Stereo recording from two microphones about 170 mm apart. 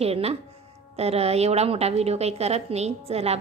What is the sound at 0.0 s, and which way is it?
A woman's voice, 35° right (ahead or behind).